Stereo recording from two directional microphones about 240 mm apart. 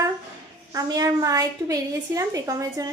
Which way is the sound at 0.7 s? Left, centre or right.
Centre.